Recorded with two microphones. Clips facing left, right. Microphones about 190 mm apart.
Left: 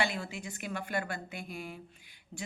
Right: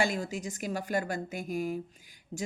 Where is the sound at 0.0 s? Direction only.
40° right (ahead or behind).